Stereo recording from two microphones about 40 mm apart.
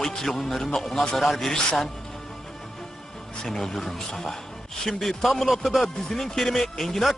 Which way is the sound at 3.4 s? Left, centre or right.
Centre.